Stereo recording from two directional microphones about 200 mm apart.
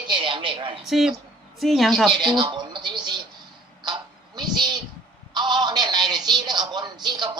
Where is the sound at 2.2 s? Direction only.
20° right (ahead or behind).